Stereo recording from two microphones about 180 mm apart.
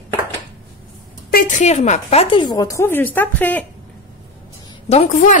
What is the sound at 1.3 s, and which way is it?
A woman's voice, 45° left (ahead or behind).